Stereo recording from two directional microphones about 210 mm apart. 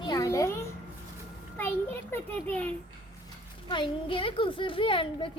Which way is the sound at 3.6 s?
25° left (ahead or behind).